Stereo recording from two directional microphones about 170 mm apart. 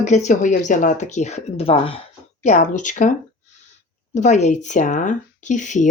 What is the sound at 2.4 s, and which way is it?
Speech, 45° left (ahead or behind).